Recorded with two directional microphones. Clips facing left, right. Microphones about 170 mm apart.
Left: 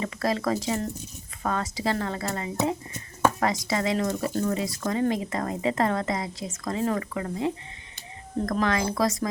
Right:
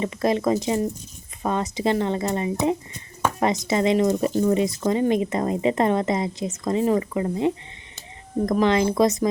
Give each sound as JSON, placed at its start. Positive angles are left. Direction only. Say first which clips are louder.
{"t": 0.0, "sound": "speech", "louder": "right 5 dB", "side_deg": -20}
{"t": 8.5, "sound": "speech", "louder": "right 7 dB", "side_deg": -20}